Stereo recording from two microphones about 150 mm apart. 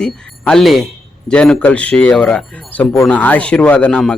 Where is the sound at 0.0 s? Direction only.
5° left (ahead or behind).